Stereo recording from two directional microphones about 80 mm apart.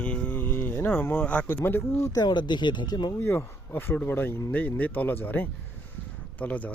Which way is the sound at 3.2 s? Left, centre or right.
Left.